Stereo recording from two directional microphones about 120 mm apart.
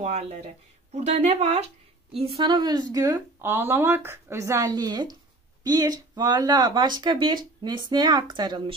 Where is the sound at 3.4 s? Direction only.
20° right (ahead or behind).